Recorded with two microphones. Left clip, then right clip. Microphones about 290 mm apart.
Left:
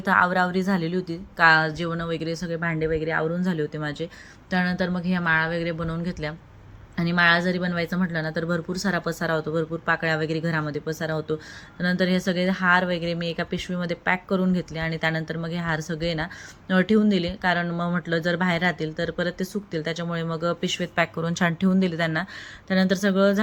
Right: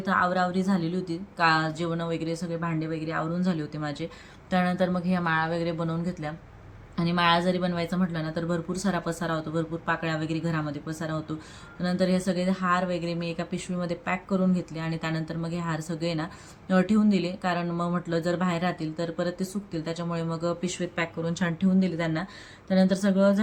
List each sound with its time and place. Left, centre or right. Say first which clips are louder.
0.0 s a woman's voice: left 4 dB; centre
2.8 s a woman's voice: left 8 dB; centre
3.4 s a woman's voice: left 4 dB; centre